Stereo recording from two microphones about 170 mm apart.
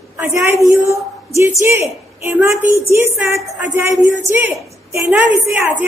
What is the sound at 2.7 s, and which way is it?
A woman's voice, 15° right (ahead or behind).